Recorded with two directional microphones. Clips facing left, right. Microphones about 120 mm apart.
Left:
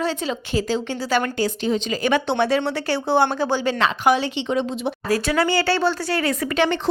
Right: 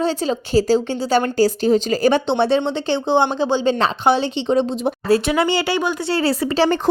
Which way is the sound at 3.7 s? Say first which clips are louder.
Right 2 dB; 30° right (ahead or behind).